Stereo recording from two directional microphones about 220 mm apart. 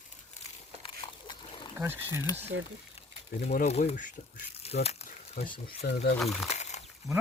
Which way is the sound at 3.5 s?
35° left (ahead or behind).